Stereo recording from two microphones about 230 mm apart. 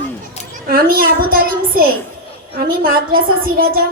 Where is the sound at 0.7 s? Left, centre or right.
Right.